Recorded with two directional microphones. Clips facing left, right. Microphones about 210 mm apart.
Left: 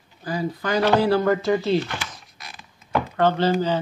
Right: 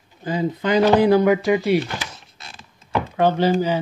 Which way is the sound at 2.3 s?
30° right (ahead or behind).